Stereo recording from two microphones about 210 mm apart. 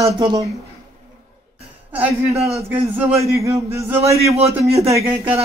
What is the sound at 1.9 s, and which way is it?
A man's voice, 10° right (ahead or behind).